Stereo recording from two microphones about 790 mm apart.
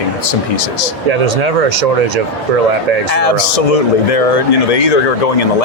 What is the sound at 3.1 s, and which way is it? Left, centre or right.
Speech, left.